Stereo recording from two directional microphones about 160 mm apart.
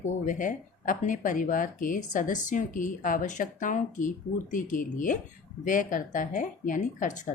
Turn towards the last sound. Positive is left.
turn(degrees=50)  # may be behind; listen again after turning